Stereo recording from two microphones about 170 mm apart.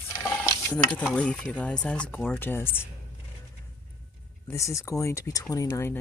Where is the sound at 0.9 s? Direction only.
5° left (ahead or behind).